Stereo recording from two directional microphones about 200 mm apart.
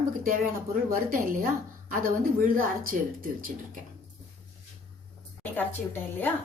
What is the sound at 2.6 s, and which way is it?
Speech, 45° right (ahead or behind).